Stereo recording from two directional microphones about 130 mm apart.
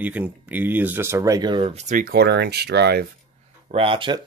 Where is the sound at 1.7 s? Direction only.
80° right.